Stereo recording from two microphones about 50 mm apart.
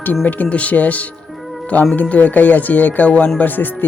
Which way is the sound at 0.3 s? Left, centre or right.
Left.